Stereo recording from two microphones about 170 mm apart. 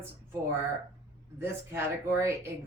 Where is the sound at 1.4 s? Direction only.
15° right (ahead or behind).